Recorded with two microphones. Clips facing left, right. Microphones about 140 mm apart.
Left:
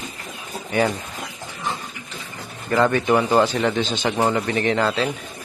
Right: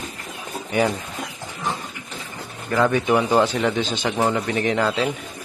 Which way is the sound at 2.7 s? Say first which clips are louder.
Left 1 dB; centre (ahead or behind).